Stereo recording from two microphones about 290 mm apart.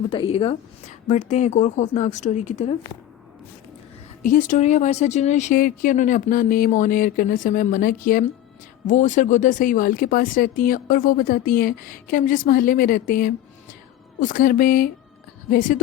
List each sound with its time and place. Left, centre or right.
0.1 s speech: centre
4.2 s speech: left